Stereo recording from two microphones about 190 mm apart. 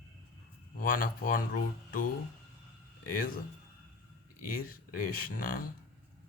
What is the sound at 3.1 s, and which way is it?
Speech, 50° left (ahead or behind).